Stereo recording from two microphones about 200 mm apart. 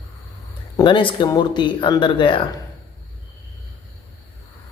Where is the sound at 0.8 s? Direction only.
25° left (ahead or behind).